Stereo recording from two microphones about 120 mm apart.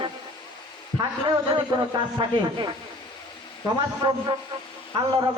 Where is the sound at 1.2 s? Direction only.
40° right (ahead or behind).